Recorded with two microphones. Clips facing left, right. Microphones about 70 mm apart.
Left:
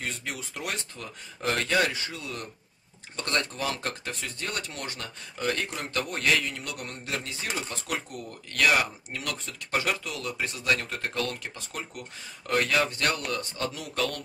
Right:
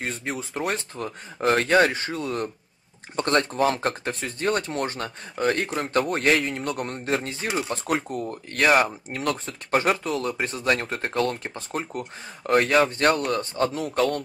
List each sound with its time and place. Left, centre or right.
0.0 s speech: right